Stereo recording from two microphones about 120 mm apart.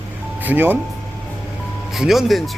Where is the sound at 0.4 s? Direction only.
15° right (ahead or behind).